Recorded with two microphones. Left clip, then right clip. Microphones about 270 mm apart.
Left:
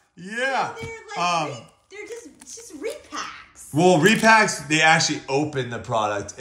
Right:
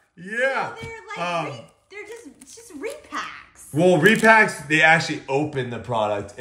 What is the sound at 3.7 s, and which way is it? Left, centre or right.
A man's voice, centre.